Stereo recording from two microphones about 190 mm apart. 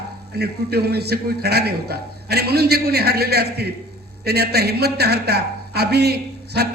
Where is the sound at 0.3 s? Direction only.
55° right (ahead or behind).